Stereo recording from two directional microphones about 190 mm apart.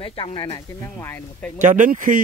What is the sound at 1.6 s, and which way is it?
Speech, 40° right (ahead or behind).